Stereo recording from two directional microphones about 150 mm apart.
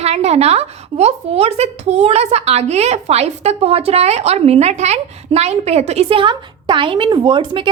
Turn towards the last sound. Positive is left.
turn(degrees=-30)  # may be behind; listen again after turning